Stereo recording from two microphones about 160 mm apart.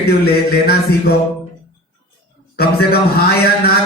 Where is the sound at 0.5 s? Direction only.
85° left.